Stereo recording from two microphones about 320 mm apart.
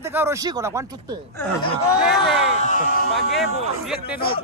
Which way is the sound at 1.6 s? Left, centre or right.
Centre.